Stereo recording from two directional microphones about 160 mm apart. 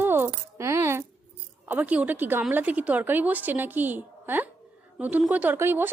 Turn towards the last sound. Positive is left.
turn(degrees=-15)  # may be behind; listen again after turning